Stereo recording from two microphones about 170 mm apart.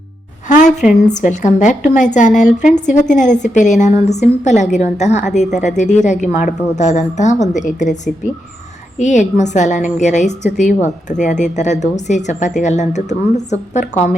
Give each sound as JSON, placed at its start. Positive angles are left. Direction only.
{"t": 0.4, "sound": "a woman's voice", "side_deg": 45}